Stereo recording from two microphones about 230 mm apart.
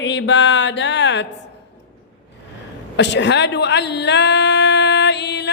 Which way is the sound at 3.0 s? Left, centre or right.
Left.